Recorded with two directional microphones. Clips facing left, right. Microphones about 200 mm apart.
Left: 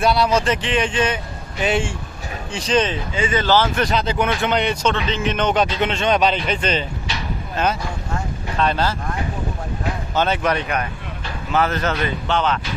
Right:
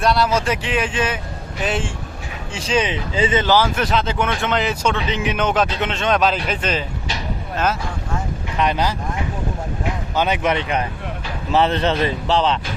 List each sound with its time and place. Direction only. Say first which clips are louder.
0.0 s speech: left 1 dB; centre (ahead or behind)
8.5 s speech: even; 15° right (ahead or behind)
10.2 s speech: even; 15° right (ahead or behind); by 12.5 s 30° right (ahead or behind)